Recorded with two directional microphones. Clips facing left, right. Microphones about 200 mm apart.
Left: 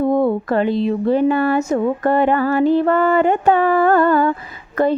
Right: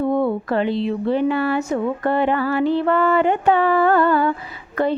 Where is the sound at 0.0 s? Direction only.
40° left (ahead or behind).